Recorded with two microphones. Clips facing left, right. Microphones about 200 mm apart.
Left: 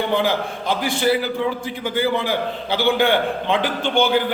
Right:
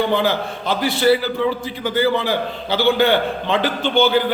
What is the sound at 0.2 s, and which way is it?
A man's voice, 15° left (ahead or behind).